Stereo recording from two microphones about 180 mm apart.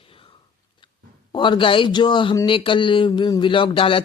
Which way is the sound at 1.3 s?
25° left (ahead or behind).